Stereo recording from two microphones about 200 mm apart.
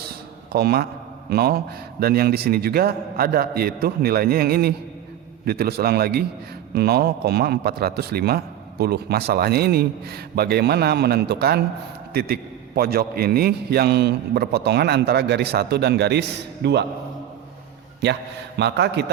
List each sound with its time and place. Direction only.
0.5 s a man's voice: 50° right (ahead or behind)
18.0 s a man's voice: 60° right (ahead or behind)